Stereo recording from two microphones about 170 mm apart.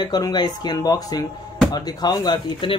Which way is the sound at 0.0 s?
25° left (ahead or behind).